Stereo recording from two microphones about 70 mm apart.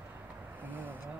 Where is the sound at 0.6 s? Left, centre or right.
Right.